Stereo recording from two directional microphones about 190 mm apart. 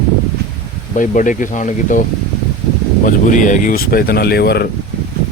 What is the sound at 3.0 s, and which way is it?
Speech, 40° left (ahead or behind).